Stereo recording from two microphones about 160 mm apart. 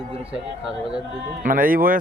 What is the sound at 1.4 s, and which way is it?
Speech, 60° right (ahead or behind).